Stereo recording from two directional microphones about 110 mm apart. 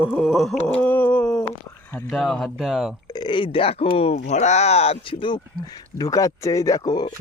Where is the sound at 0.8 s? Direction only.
15° left (ahead or behind).